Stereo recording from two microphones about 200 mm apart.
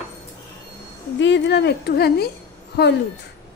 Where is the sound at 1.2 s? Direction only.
60° left (ahead or behind).